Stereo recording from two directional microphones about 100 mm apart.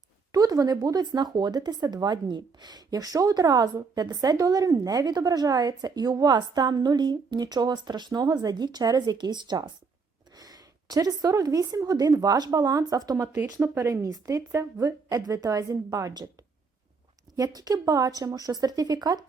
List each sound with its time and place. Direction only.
0.3 s a woman's voice: 40° right (ahead or behind)
17.3 s a woman's voice: 40° right (ahead or behind)